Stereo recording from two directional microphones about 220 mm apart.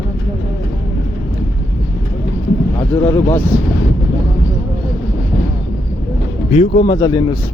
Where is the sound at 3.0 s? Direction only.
10° left (ahead or behind).